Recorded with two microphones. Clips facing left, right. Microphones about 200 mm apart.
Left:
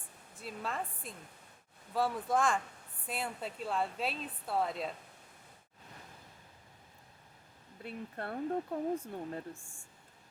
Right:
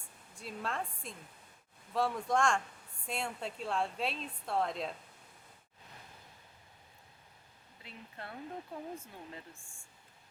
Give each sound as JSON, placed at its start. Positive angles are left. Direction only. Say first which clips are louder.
{"t": 0.3, "sound": "a woman's voice", "louder": "even", "side_deg": 0}
{"t": 7.8, "sound": "speech", "louder": "left 8 dB", "side_deg": 50}